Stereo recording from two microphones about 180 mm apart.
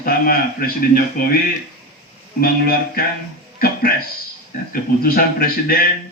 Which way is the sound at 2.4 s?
55° left (ahead or behind).